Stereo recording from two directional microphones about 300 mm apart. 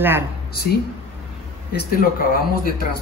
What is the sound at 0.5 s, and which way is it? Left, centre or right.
Speech, left.